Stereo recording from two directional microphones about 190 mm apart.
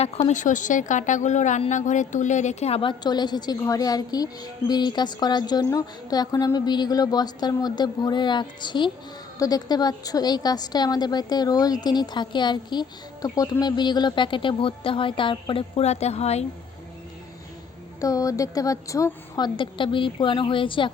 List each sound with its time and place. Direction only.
0.3 s a woman's voice: 40° left (ahead or behind)
18.0 s a woman's voice: 15° left (ahead or behind)